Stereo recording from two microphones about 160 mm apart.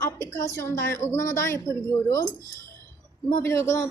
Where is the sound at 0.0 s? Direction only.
15° left (ahead or behind).